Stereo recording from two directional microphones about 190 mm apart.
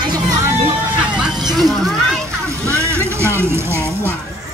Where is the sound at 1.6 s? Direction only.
Centre (ahead or behind).